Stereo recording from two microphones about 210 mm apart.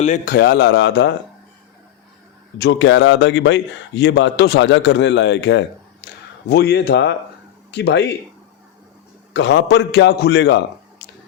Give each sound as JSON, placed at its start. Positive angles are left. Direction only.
{"t": 0.0, "sound": "a man's voice", "side_deg": 35}
{"t": 0.3, "sound": "a man's voice", "side_deg": 55}
{"t": 2.6, "sound": "a man's voice", "side_deg": 55}
{"t": 9.3, "sound": "a man's voice", "side_deg": 55}